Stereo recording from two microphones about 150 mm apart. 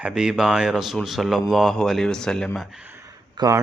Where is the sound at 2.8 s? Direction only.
15° right (ahead or behind).